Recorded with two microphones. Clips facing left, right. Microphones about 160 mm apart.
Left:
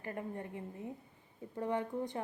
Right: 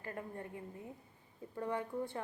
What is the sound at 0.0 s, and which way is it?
A woman's voice, 20° left (ahead or behind).